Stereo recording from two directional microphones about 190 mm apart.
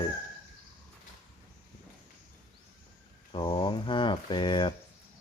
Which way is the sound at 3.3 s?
25° left (ahead or behind).